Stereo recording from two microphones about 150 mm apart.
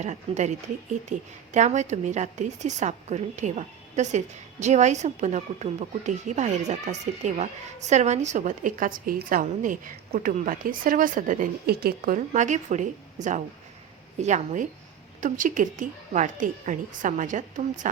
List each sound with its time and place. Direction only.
0.0 s a woman's voice: 50° right (ahead or behind)